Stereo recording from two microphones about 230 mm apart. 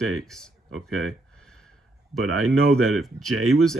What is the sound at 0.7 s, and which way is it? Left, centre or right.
Speech, right.